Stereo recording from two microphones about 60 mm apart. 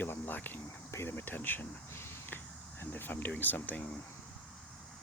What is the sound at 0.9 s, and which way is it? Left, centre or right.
Speech, left.